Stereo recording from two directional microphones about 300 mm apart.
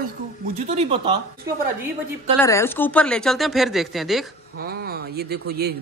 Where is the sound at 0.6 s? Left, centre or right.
Right.